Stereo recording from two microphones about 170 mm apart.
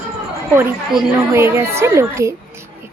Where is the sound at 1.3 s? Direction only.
15° right (ahead or behind).